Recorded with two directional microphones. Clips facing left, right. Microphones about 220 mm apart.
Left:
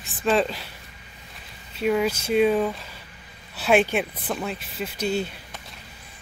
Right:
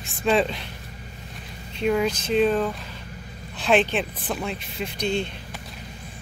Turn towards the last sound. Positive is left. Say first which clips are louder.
# even
turn(degrees=5)  # may be behind; listen again after turning